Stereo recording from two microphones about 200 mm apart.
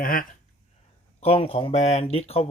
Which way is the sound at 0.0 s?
45° left (ahead or behind).